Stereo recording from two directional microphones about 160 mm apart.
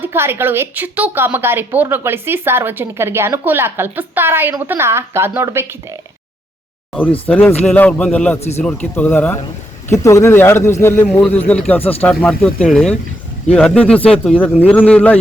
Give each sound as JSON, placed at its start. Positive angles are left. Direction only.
{"t": 0.0, "sound": "a woman's voice", "side_deg": -15}
{"t": 6.9, "sound": "a man's voice", "side_deg": 10}
{"t": 8.4, "sound": "speech", "side_deg": 40}
{"t": 8.6, "sound": "a man's voice", "side_deg": 10}
{"t": 11.8, "sound": "speech", "side_deg": 40}
{"t": 12.0, "sound": "a man's voice", "side_deg": 10}